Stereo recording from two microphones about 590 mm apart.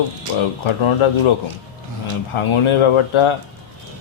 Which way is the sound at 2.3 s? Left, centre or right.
Left.